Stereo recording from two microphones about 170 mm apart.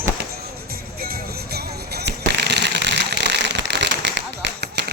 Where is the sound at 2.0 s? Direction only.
90° right.